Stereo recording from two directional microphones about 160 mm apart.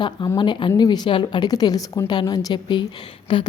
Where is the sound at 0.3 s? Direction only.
30° left (ahead or behind).